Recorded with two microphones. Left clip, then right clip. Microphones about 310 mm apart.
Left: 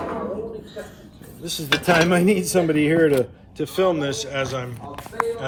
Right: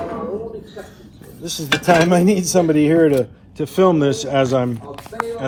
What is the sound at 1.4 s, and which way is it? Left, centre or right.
Speech, right.